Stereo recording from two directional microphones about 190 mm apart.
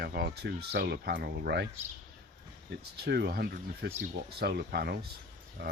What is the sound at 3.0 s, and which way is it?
Speech, 60° right (ahead or behind).